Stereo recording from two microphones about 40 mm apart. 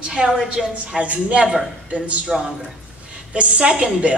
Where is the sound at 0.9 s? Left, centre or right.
Right.